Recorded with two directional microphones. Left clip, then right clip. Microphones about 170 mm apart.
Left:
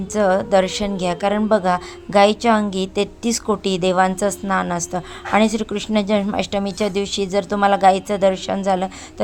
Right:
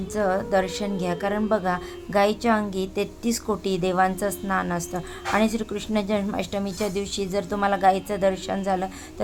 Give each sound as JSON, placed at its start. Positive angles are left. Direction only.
{"t": 0.1, "sound": "a woman's voice", "side_deg": 25}